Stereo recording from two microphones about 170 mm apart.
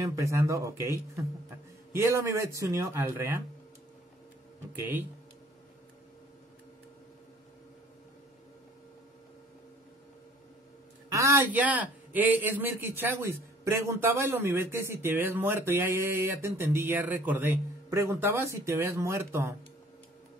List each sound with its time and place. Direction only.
0.0 s a man's voice: 20° right (ahead or behind)
11.1 s a man's voice: 20° right (ahead or behind)